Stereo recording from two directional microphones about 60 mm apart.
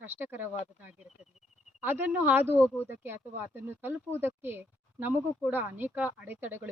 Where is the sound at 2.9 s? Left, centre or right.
Right.